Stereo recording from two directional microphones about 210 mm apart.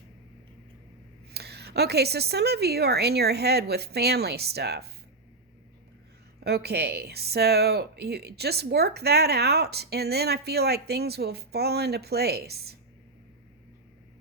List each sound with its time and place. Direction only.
1.3 s a woman's voice: 50° right (ahead or behind)
6.4 s a woman's voice: 50° right (ahead or behind)